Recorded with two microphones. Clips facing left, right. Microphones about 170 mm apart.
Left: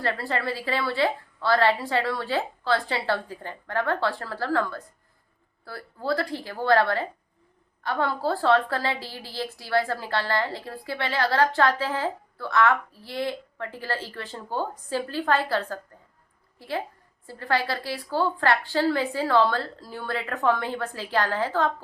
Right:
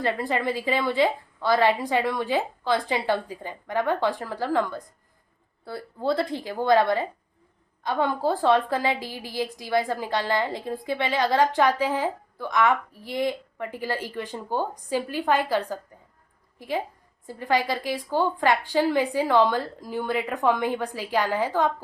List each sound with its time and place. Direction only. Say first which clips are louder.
0.0 s a woman's voice: right 2 dB; 15° right (ahead or behind)